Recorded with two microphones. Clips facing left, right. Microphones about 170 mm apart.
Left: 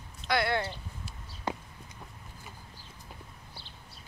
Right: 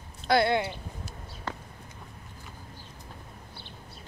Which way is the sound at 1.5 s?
15° left (ahead or behind).